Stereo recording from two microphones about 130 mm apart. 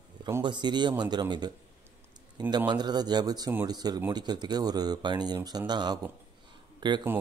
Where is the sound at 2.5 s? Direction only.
35° right (ahead or behind).